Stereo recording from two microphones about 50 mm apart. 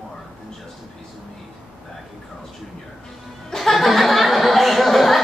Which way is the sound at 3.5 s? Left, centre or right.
Centre.